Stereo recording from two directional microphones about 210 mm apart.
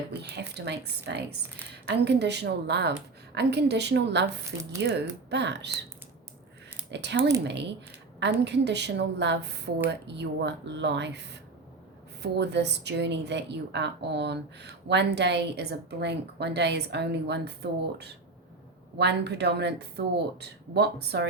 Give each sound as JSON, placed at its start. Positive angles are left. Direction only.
{"t": 0.2, "sound": "a woman's voice", "side_deg": -50}
{"t": 6.9, "sound": "a woman's voice", "side_deg": -55}